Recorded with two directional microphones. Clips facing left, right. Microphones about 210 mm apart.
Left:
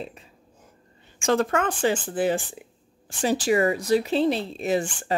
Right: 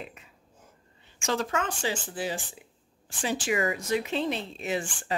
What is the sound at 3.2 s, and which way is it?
Speech, 40° left (ahead or behind).